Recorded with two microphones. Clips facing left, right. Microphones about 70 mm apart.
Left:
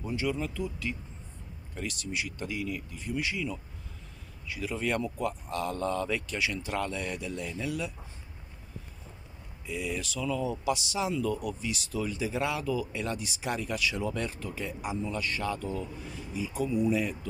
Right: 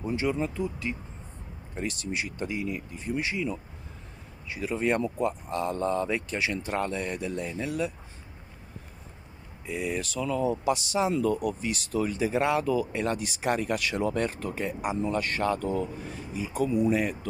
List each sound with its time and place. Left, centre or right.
0.0 s speech: right
9.7 s speech: right